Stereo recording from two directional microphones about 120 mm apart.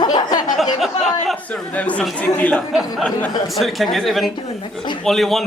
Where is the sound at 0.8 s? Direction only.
Centre (ahead or behind).